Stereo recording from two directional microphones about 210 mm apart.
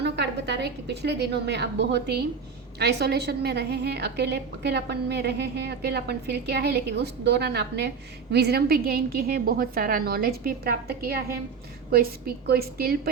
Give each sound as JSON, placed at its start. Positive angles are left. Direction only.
{"t": 0.0, "sound": "a woman's voice", "side_deg": -55}